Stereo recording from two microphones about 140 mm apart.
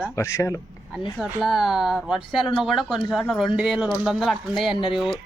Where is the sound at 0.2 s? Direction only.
20° left (ahead or behind).